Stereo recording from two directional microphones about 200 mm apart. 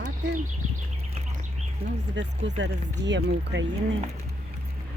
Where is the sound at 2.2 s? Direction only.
60° right (ahead or behind).